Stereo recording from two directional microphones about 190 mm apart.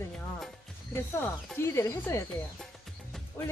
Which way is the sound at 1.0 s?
15° left (ahead or behind).